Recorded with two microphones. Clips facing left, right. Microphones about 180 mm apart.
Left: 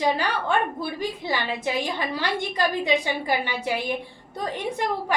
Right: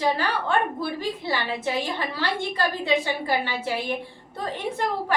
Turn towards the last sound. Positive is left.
turn(degrees=15)  # may be behind; listen again after turning